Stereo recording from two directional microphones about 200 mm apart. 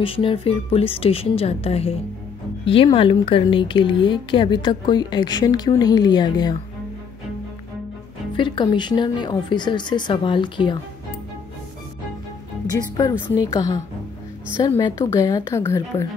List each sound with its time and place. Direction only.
0.0 s a woman's voice: 25° left (ahead or behind)
8.4 s a woman's voice: 25° left (ahead or behind)
12.9 s a woman's voice: 20° left (ahead or behind)